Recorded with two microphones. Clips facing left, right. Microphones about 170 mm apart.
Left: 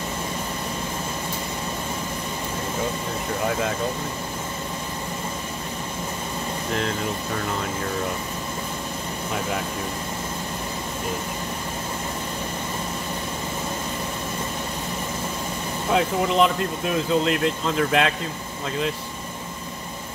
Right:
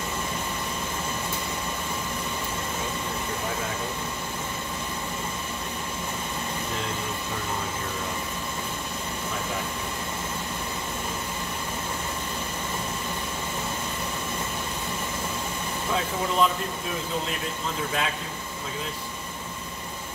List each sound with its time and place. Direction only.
15.9 s speech: 75° left (ahead or behind)